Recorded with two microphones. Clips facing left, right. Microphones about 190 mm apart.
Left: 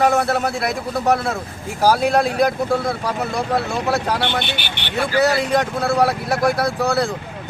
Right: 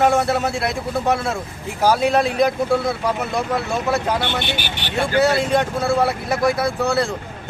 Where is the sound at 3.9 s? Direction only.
Centre (ahead or behind).